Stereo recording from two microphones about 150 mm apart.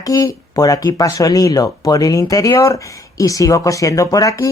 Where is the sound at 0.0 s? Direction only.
20° left (ahead or behind).